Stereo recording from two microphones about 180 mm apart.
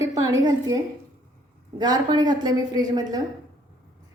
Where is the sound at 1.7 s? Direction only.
25° right (ahead or behind).